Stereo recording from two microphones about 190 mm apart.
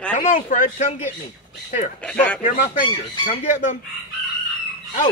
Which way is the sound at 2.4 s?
40° left (ahead or behind).